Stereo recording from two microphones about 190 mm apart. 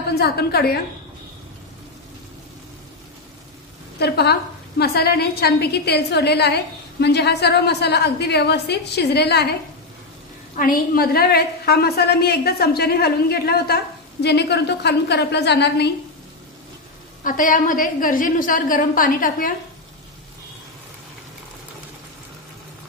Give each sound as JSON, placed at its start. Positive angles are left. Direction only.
{"t": 0.1, "sound": "a woman's voice", "side_deg": 55}
{"t": 4.0, "sound": "a woman's voice", "side_deg": 60}
{"t": 10.6, "sound": "a woman's voice", "side_deg": 50}
{"t": 17.2, "sound": "a woman's voice", "side_deg": 45}